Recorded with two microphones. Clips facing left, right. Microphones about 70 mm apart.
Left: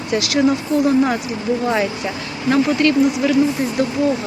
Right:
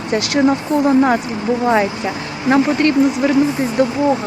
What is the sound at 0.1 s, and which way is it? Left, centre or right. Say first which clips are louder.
Speech: right 2 dB; right.